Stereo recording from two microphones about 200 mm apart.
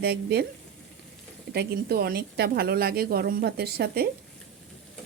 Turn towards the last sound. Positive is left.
turn(degrees=-50)  # may be behind; listen again after turning